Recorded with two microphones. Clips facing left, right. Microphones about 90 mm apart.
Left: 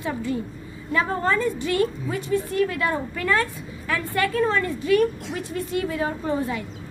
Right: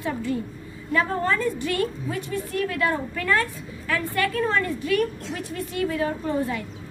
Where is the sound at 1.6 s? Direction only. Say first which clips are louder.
Left 3 dB; 20° left (ahead or behind).